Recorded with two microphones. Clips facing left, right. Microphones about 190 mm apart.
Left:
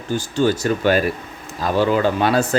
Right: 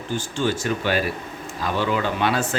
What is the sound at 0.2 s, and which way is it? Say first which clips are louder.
Speech: left 7 dB; 40° left (ahead or behind).